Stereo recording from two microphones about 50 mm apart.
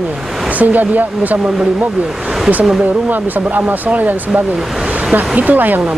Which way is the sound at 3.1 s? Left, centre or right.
Right.